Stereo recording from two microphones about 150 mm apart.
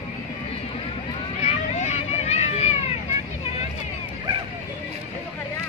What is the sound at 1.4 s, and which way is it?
Vehicle, 45° left (ahead or behind).